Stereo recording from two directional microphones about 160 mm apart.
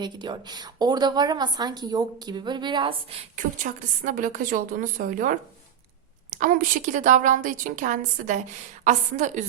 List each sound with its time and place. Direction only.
0.0 s a woman's voice: 25° right (ahead or behind); by 9.4 s 50° right (ahead or behind)